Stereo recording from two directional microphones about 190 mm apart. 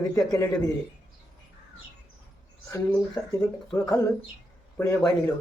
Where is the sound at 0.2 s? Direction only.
20° left (ahead or behind).